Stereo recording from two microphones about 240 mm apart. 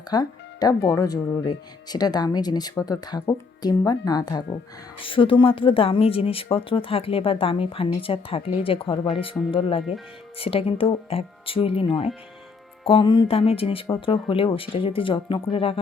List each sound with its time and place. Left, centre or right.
0.1 s speech: centre